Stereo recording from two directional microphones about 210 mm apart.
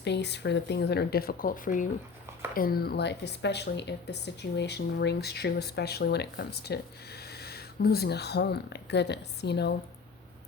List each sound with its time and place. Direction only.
0.0 s speech: 55° left (ahead or behind)